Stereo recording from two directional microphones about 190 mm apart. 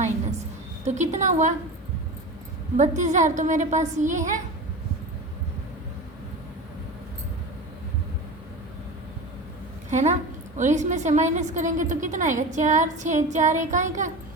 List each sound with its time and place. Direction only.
0.9 s a woman's voice: 40° right (ahead or behind)
2.7 s a woman's voice: 40° right (ahead or behind)
9.9 s a woman's voice: 40° right (ahead or behind)